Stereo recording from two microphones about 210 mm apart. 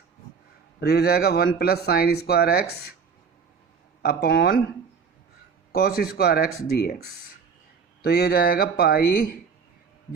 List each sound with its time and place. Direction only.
0.8 s speech: 50° left (ahead or behind)
4.0 s speech: 45° left (ahead or behind)
5.7 s speech: 45° left (ahead or behind)